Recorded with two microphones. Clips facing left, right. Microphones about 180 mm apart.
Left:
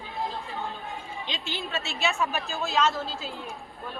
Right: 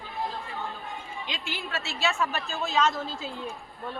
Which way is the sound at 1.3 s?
25° left (ahead or behind).